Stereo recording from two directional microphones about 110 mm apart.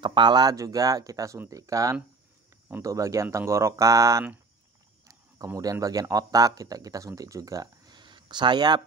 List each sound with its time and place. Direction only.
0.0 s speech: 45° right (ahead or behind)
5.6 s speech: 35° right (ahead or behind)